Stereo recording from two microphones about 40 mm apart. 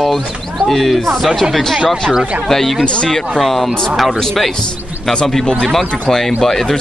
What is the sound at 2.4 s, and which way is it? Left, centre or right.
Speech, centre.